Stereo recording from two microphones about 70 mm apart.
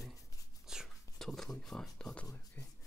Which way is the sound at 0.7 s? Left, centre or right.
Centre.